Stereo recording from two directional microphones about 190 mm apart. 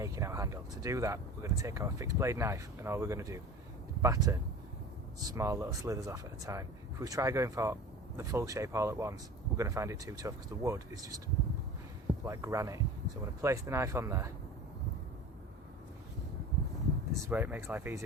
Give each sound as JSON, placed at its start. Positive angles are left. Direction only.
{"t": 0.0, "sound": "speech", "side_deg": -15}
{"t": 12.2, "sound": "speech", "side_deg": -15}
{"t": 17.2, "sound": "speech", "side_deg": -10}